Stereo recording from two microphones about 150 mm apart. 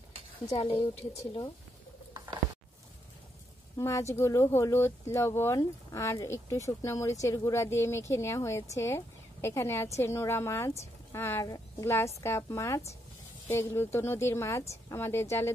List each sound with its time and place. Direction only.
0.5 s speech: 40° left (ahead or behind)
3.7 s a woman's voice: 20° left (ahead or behind)